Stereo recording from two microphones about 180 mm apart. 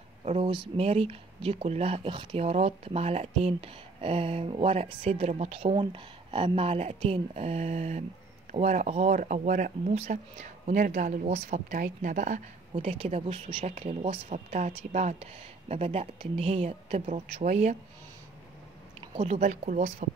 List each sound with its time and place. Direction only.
0.2 s speech: 35° right (ahead or behind)
19.1 s speech: 35° right (ahead or behind)